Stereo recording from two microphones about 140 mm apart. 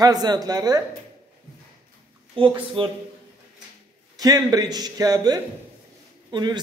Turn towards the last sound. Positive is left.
turn(degrees=-30)  # may be behind; listen again after turning